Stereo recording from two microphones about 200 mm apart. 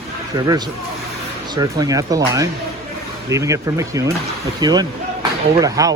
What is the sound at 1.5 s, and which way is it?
Speech, 20° right (ahead or behind).